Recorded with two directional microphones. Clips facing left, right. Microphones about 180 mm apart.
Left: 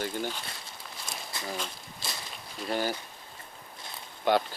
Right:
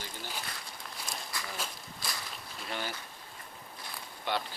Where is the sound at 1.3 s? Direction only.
25° left (ahead or behind).